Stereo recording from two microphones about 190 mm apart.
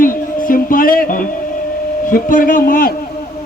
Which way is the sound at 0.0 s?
45° left (ahead or behind).